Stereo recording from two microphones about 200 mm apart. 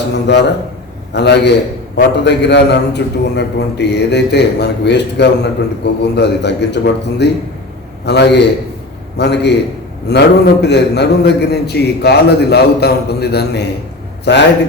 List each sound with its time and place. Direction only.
0.1 s a man's voice: 60° left (ahead or behind)